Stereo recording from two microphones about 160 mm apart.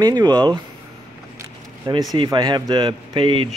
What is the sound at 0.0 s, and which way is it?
Speech, 25° right (ahead or behind).